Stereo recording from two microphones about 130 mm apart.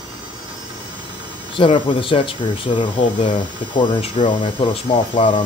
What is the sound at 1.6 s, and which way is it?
Speech, 40° left (ahead or behind).